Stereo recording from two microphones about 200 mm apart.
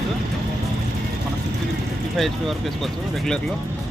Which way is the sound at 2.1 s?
Centre (ahead or behind).